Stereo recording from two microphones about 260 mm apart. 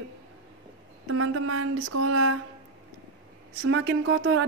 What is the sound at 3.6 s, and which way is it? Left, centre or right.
Speech, right.